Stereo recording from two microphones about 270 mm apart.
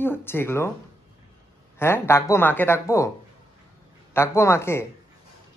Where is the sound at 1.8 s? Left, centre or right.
Centre.